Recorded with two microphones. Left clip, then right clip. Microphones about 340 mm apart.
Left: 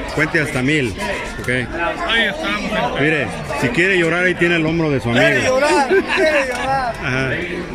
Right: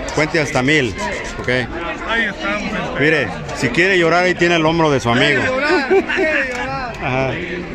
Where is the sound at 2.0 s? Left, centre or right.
Centre.